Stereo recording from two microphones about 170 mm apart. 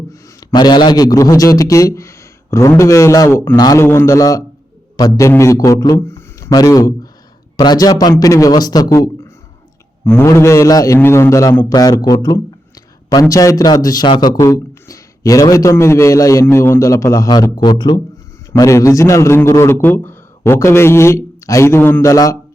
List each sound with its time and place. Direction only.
0.1 s a man's voice: 20° left (ahead or behind)